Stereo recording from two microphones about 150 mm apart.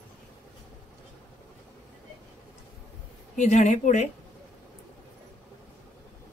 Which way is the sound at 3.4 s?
55° left (ahead or behind).